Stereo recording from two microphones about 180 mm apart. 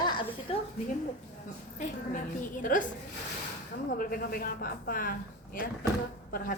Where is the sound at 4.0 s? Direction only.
50° left (ahead or behind).